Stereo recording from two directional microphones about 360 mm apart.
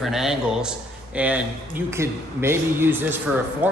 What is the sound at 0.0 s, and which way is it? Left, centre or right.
Speech, centre.